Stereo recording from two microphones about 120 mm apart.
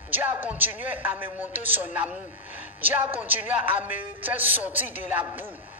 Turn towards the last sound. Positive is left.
turn(degrees=-15)  # may be behind; listen again after turning